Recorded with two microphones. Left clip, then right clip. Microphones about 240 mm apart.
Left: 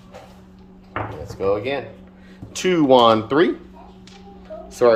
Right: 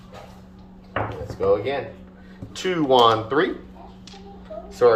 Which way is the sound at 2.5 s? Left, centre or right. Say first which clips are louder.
Left 4 dB; left.